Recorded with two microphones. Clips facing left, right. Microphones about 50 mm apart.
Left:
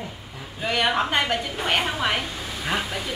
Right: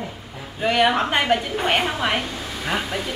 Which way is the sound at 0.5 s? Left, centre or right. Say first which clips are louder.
Right 4 dB; centre.